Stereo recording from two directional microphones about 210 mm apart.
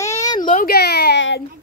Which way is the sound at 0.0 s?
15° left (ahead or behind).